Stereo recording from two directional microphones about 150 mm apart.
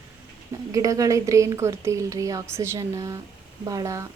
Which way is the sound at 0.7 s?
20° right (ahead or behind).